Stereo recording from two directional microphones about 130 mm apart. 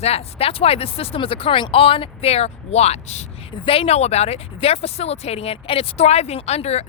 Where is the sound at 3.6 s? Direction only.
45° left (ahead or behind).